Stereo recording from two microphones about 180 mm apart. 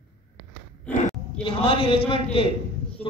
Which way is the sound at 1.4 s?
30° left (ahead or behind).